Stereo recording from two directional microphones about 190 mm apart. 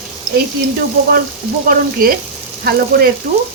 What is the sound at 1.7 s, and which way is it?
Frying, 50° right (ahead or behind).